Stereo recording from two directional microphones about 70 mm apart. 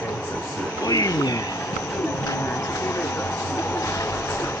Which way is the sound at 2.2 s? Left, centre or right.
Left.